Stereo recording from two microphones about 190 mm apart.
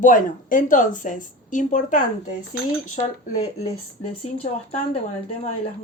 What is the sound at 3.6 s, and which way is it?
Speech, 35° left (ahead or behind).